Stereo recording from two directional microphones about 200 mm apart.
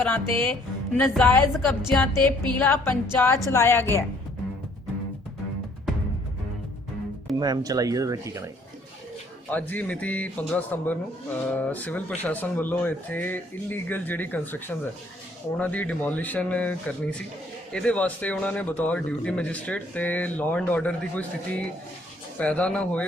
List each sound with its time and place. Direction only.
0.0 s a man's voice: 10° left (ahead or behind)
7.3 s speech: 20° right (ahead or behind)
9.5 s a man's voice: 10° left (ahead or behind)